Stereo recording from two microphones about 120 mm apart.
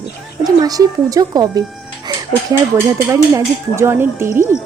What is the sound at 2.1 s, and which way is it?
Chicken, 35° right (ahead or behind).